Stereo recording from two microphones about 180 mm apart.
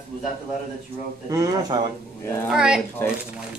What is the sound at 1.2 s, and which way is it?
Speech, 20° right (ahead or behind).